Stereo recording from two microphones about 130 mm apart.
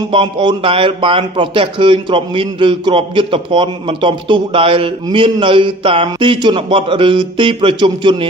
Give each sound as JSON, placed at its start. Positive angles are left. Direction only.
{"t": 0.1, "sound": "a man's voice", "side_deg": -40}